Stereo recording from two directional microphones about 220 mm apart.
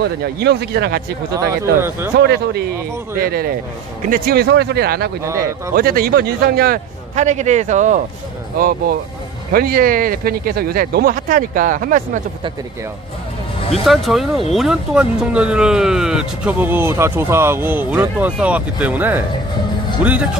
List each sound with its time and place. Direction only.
0.0 s a man's voice: 45° right (ahead or behind)
1.3 s speech: 15° right (ahead or behind)
2.1 s a man's voice: 50° right (ahead or behind)
5.2 s speech: 15° right (ahead or behind)
5.8 s speech: 40° right (ahead or behind)
13.8 s speech: centre (ahead or behind)